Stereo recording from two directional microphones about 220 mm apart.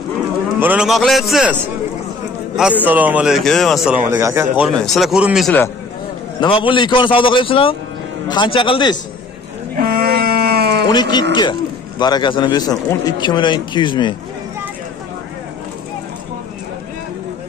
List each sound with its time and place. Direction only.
0.6 s speech: 5° right (ahead or behind)
2.8 s speech: 5° right (ahead or behind)
4.1 s speech: 15° right (ahead or behind)
4.6 s speech: centre (ahead or behind)
6.4 s a man's voice: 25° left (ahead or behind)
9.8 s a sound: 45° right (ahead or behind)
10.9 s a man's voice: 20° left (ahead or behind)